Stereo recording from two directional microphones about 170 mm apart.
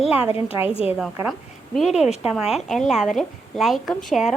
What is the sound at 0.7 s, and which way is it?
Speech, 35° left (ahead or behind).